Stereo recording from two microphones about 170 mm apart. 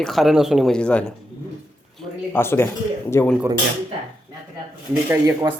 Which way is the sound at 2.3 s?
15° left (ahead or behind).